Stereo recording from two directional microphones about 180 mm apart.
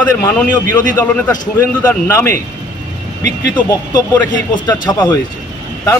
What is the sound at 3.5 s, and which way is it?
A man's voice, 20° left (ahead or behind).